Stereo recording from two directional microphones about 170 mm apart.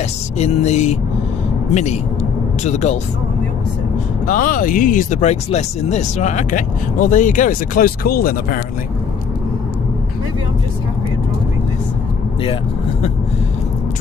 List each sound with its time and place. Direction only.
0.4 s vehicle: 40° left (ahead or behind)
4.3 s speech: 50° left (ahead or behind)